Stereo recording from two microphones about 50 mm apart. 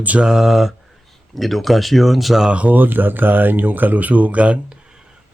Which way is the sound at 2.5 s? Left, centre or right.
Right.